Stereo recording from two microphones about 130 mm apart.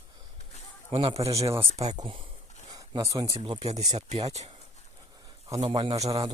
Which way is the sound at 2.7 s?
30° right (ahead or behind).